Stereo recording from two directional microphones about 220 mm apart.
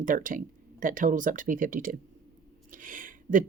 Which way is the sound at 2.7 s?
35° right (ahead or behind).